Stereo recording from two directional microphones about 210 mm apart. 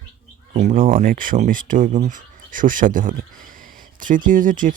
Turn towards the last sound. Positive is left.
turn(degrees=-40)  # may be behind; listen again after turning